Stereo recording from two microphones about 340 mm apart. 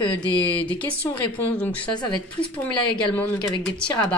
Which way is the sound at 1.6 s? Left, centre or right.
Centre.